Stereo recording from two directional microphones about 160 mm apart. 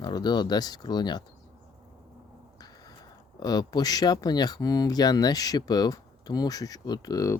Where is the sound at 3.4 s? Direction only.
25° left (ahead or behind).